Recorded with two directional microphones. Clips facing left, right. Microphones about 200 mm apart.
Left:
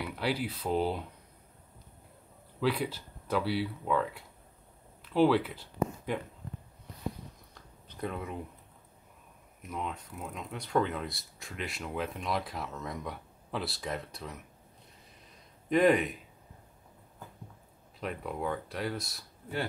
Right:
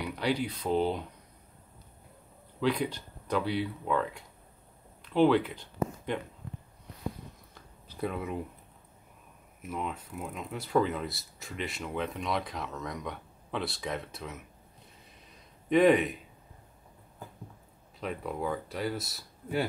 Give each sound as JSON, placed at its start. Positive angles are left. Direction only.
{"t": 0.1, "sound": "speech", "side_deg": 5}
{"t": 2.6, "sound": "speech", "side_deg": 5}
{"t": 7.5, "sound": "a sound", "side_deg": -5}
{"t": 9.6, "sound": "speech", "side_deg": -5}
{"t": 15.7, "sound": "speech", "side_deg": 0}
{"t": 18.0, "sound": "speech", "side_deg": 0}